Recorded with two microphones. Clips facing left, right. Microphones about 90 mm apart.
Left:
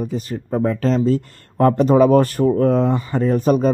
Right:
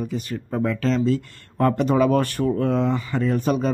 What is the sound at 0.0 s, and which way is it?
A man's voice, 35° left (ahead or behind).